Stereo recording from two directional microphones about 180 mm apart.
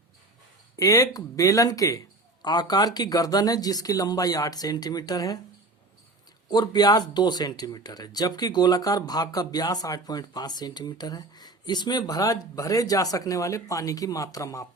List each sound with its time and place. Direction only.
0.8 s speech: 20° left (ahead or behind)
6.5 s speech: 20° left (ahead or behind)